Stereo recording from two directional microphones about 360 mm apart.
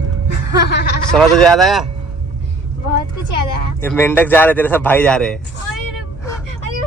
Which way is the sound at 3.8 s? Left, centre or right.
Centre.